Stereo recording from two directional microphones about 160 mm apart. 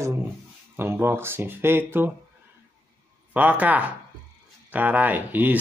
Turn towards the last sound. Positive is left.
turn(degrees=-10)  # may be behind; listen again after turning